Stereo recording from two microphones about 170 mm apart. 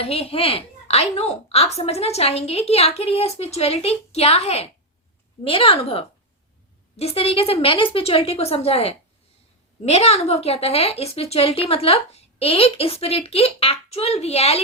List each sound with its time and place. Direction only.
0.0 s a woman's voice: 35° left (ahead or behind)